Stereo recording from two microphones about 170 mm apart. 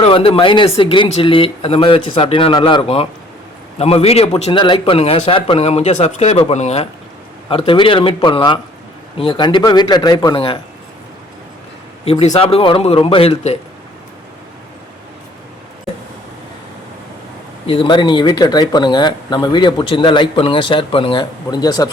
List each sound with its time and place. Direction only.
0.0 s a man's voice: 35° left (ahead or behind)
12.1 s a man's voice: 40° left (ahead or behind)
17.7 s speech: 30° left (ahead or behind)